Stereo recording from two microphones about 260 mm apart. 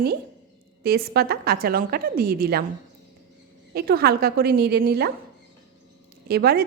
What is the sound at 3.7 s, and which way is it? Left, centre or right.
A woman's voice, right.